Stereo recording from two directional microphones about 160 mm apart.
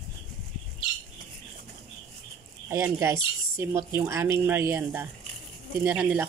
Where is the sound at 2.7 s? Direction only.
15° right (ahead or behind).